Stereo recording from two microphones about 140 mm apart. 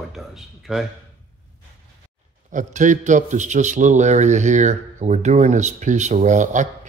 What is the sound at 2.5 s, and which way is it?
A man's voice, 65° right (ahead or behind).